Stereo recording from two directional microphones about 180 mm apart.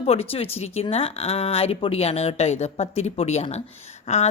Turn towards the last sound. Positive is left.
turn(degrees=40)  # may be behind; listen again after turning